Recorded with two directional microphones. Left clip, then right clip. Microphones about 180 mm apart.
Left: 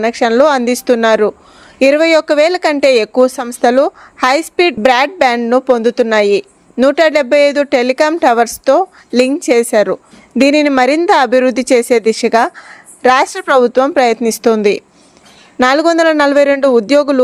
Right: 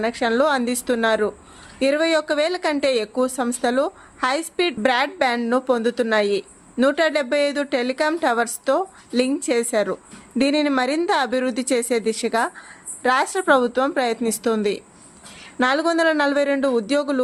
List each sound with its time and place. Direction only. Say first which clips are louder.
0.0 s a woman's voice: left 10 dB; 40° left (ahead or behind)